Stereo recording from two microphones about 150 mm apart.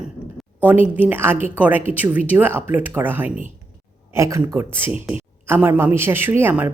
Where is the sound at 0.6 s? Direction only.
10° right (ahead or behind).